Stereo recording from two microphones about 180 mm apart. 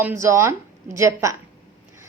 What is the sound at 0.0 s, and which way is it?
A woman's voice, 15° right (ahead or behind).